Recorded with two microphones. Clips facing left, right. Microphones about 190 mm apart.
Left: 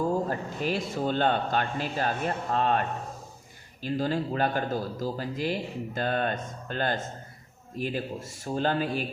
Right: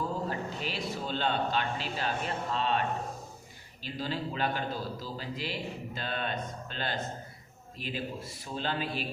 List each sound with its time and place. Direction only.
0.3 s a man's voice: 45° left (ahead or behind)
3.8 s a man's voice: 45° left (ahead or behind)